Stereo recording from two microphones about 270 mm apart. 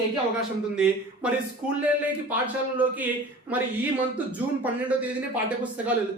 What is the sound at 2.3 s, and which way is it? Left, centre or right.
Speech, centre.